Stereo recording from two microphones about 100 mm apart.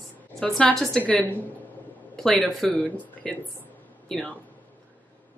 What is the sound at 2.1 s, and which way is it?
Speech, 5° left (ahead or behind).